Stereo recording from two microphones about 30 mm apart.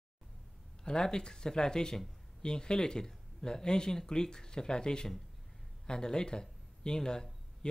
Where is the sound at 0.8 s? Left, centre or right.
Left.